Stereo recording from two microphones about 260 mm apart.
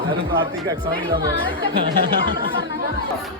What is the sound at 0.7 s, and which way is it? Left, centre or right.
Speech, right.